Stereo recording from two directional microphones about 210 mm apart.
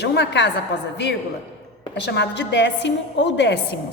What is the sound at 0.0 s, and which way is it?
Speech, 55° left (ahead or behind).